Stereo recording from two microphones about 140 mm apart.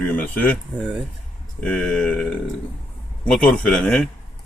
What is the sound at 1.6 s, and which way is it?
Speech, 5° left (ahead or behind).